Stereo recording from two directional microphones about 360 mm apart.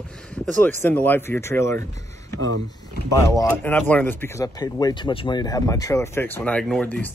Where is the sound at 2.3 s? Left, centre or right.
Right.